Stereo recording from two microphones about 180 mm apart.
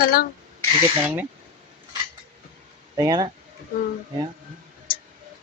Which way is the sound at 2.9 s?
20° right (ahead or behind).